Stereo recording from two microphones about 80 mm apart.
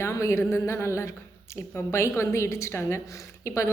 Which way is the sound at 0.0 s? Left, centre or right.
Left.